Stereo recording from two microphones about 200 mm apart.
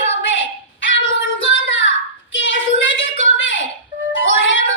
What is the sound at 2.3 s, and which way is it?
Child singing, 70° left (ahead or behind).